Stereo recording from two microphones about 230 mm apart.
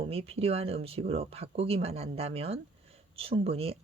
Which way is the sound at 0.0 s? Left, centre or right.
Right.